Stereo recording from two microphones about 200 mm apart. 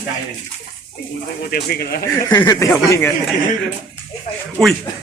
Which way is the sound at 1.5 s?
50° left (ahead or behind).